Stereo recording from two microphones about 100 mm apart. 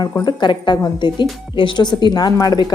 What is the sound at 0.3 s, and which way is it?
Speech, 50° left (ahead or behind).